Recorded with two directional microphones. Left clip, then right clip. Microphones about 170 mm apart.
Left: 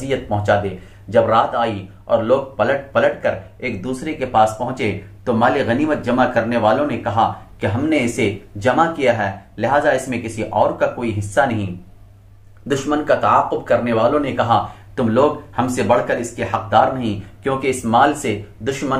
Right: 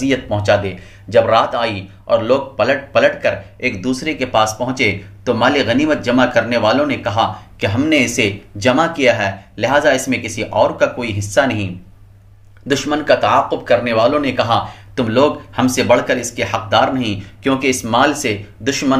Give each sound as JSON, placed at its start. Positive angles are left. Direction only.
{"t": 0.1, "sound": "speech", "side_deg": -25}
{"t": 12.6, "sound": "speech", "side_deg": -25}